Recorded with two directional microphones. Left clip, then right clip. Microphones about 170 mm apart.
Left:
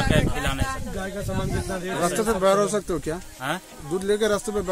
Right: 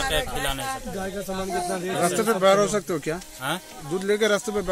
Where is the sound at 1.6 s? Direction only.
50° right (ahead or behind).